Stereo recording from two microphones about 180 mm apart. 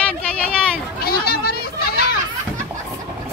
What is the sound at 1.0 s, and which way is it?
Children playing, 55° left (ahead or behind).